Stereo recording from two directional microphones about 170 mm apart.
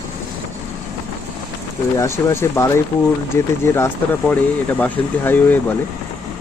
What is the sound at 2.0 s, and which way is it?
Speech, 15° left (ahead or behind).